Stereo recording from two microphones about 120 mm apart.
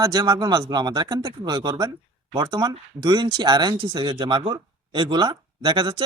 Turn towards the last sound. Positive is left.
turn(degrees=-40)  # may be behind; listen again after turning